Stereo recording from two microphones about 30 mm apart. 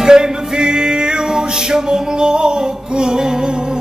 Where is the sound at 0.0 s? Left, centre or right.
Right.